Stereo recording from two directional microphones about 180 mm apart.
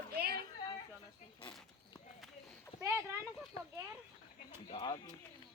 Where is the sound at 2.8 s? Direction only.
15° right (ahead or behind).